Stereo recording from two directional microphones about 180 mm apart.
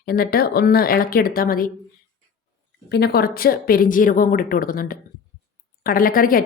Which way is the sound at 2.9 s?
60° left (ahead or behind).